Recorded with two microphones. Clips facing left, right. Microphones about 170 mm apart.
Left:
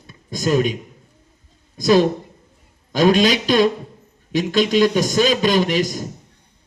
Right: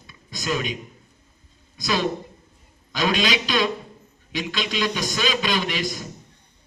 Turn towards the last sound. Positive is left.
turn(degrees=45)  # may be behind; listen again after turning